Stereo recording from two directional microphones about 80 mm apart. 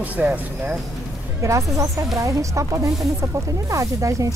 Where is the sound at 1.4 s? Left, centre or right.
Right.